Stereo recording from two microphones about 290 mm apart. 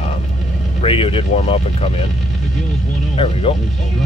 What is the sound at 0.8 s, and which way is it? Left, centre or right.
Speech, centre.